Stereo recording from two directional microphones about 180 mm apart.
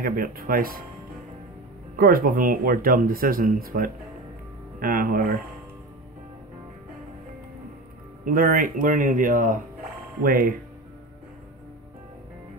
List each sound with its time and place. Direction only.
0.0 s speech: 55° right (ahead or behind)
2.0 s speech: 55° right (ahead or behind)
8.3 s speech: 55° right (ahead or behind)